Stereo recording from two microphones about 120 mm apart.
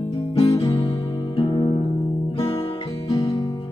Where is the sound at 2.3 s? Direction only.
50° left (ahead or behind).